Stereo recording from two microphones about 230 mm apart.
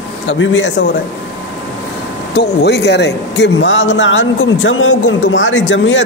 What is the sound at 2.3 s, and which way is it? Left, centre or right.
Speech, left.